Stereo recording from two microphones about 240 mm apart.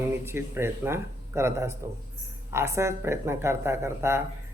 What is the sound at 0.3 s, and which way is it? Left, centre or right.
Speech, centre.